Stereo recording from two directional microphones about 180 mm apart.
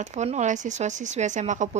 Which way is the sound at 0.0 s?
40° right (ahead or behind).